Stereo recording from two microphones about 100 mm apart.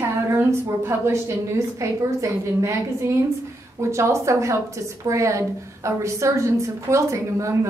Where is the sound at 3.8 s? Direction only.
30° right (ahead or behind).